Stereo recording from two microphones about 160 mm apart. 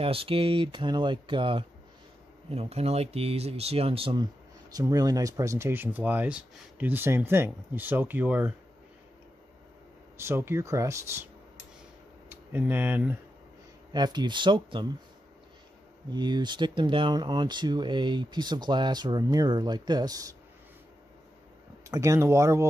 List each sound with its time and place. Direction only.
0.0 s speech: 35° right (ahead or behind); by 8.5 s 10° right (ahead or behind)
10.1 s speech: 15° right (ahead or behind)
12.3 s speech: 10° right (ahead or behind)
13.9 s speech: 25° right (ahead or behind)
16.1 s speech: 25° right (ahead or behind)
21.8 s speech: 20° right (ahead or behind)